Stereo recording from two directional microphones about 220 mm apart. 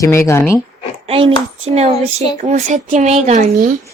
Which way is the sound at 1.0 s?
25° right (ahead or behind).